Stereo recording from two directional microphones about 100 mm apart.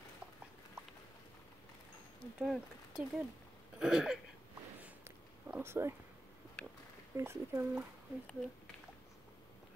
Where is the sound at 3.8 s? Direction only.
5° right (ahead or behind).